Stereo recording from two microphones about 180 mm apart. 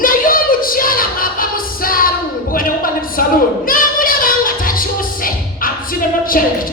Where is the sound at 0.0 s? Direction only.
50° left (ahead or behind).